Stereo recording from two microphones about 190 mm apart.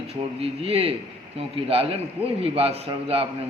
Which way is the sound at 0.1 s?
30° right (ahead or behind).